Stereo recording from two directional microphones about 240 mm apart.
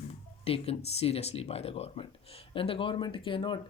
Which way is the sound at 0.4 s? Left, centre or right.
Left.